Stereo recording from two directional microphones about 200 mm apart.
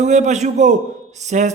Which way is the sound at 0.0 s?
35° right (ahead or behind).